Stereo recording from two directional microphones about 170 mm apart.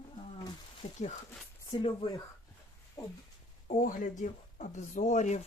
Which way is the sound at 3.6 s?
50° left (ahead or behind).